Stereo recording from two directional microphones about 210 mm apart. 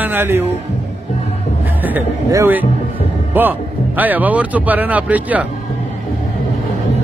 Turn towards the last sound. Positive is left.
turn(degrees=-5)  # may be behind; listen again after turning